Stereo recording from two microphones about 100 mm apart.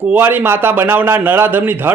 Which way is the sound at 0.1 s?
20° right (ahead or behind).